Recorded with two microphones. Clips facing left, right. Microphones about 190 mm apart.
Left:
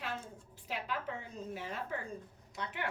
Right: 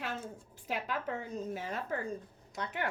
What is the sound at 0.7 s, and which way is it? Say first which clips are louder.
A woman's voice: right 3 dB; 45° right (ahead or behind).